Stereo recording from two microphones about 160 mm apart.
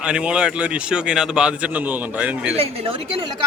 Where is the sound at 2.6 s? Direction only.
35° right (ahead or behind).